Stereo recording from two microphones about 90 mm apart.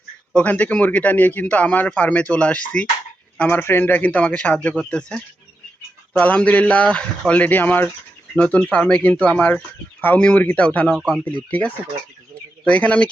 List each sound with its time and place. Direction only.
0.3 s a man's voice: 15° left (ahead or behind)
10.9 s speech: 5° right (ahead or behind)
11.5 s a man's voice: 15° left (ahead or behind)